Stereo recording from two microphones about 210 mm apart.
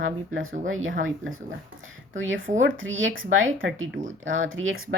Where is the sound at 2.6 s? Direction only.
70° right (ahead or behind).